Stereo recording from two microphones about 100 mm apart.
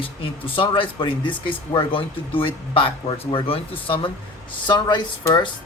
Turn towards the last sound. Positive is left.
turn(degrees=45)  # may be behind; listen again after turning